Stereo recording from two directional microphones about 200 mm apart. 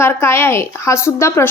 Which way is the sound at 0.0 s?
10° left (ahead or behind).